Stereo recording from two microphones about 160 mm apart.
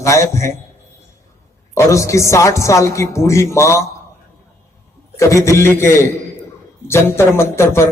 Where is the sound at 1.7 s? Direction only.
20° left (ahead or behind).